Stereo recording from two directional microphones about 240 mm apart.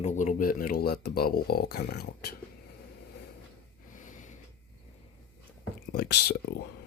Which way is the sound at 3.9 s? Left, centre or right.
Left.